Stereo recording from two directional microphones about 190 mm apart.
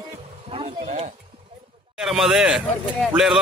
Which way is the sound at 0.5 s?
30° right (ahead or behind).